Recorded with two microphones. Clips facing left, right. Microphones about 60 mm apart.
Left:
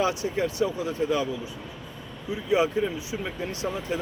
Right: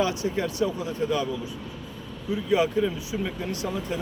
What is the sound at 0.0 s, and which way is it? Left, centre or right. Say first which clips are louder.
Speech: even; left.